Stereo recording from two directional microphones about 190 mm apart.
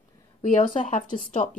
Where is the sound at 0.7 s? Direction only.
40° left (ahead or behind).